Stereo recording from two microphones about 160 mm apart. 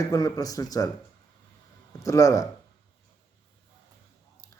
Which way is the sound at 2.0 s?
20° left (ahead or behind).